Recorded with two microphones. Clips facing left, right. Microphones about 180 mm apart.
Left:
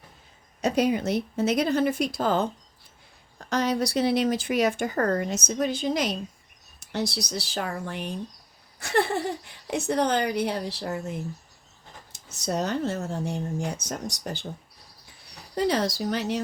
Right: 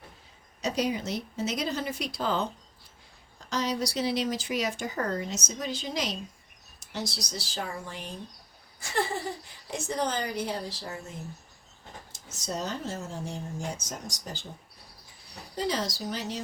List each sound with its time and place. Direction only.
0.6 s speech: 55° left (ahead or behind)
3.5 s speech: 55° left (ahead or behind)
12.1 s speech: 65° left (ahead or behind)
15.5 s speech: 65° left (ahead or behind)